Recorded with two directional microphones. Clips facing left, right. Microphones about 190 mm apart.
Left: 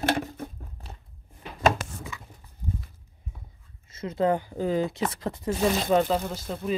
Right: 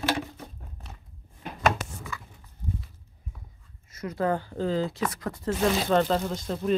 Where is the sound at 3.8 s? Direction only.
25° left (ahead or behind).